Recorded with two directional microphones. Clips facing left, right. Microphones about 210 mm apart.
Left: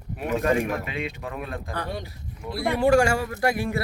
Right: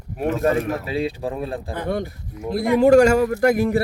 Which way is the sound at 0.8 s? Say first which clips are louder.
Right 8 dB; 35° right (ahead or behind).